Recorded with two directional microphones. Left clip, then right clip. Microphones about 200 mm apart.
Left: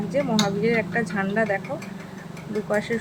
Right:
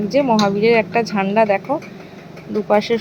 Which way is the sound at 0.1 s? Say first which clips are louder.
Right 8 dB; 25° right (ahead or behind).